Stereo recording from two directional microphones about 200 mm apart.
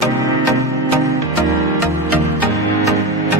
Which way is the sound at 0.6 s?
15° left (ahead or behind).